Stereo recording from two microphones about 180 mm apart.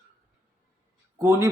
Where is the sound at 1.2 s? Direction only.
15° right (ahead or behind).